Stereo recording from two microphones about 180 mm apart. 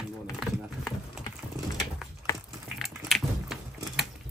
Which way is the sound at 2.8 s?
Centre (ahead or behind).